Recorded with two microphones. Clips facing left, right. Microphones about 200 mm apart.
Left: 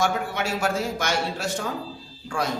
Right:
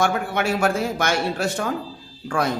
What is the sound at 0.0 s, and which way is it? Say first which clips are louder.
A man's voice: right 3 dB; 55° right (ahead or behind).